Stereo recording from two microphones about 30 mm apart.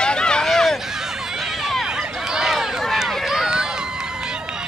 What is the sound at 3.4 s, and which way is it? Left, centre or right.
Run, right.